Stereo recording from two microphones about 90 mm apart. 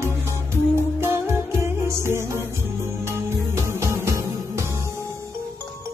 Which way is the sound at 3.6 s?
30° right (ahead or behind).